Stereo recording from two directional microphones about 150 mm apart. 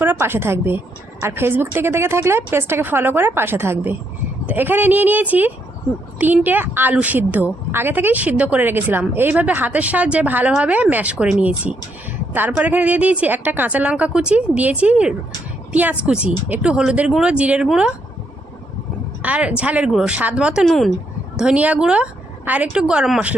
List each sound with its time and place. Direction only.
0.0 s a woman's voice: 15° right (ahead or behind)
19.2 s a woman's voice: 10° right (ahead or behind)